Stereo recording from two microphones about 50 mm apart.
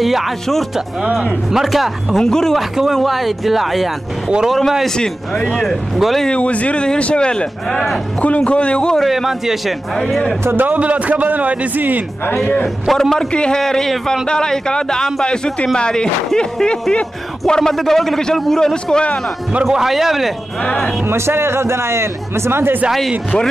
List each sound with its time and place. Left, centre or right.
0.0 s speech: centre
2.2 s a man's voice: centre
2.5 s a man's voice: centre
5.9 s speech: centre
6.2 s a man's voice: left
8.9 s speech: centre
9.9 s a man's voice: centre
10.4 s a man's voice: right
10.7 s a man's voice: right
12.8 s speech: centre
13.3 s a man's voice: centre
13.6 s a man's voice: centre
19.6 s speech: centre
21.1 s speech: right